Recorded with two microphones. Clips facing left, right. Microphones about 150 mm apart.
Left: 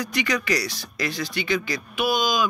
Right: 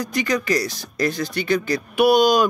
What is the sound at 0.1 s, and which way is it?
Speech, 45° right (ahead or behind).